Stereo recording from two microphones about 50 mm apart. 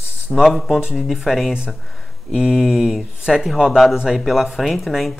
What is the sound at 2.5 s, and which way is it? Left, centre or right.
Speech, centre.